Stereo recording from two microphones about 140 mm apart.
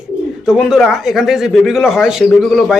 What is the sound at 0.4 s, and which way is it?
A man's voice, 5° right (ahead or behind).